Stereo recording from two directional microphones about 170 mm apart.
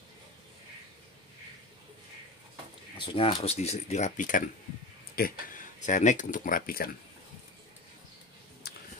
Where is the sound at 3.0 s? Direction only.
30° left (ahead or behind); by 6.9 s 60° left (ahead or behind).